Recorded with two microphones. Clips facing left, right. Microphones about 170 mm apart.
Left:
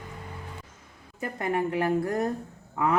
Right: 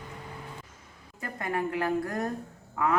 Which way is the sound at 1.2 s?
20° left (ahead or behind).